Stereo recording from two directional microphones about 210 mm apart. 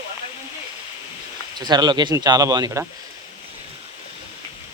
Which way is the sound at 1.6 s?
20° right (ahead or behind).